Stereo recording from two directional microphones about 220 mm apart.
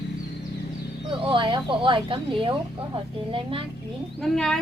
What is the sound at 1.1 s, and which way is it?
Speech, 25° right (ahead or behind).